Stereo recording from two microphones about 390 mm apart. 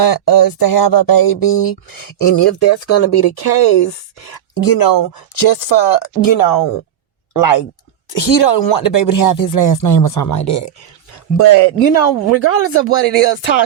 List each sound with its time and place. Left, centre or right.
0.0 s speech: left
2.1 s speech: left
4.6 s speech: left
8.1 s speech: left